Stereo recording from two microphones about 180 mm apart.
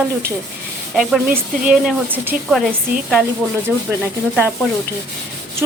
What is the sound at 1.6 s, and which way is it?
Rub, 5° right (ahead or behind).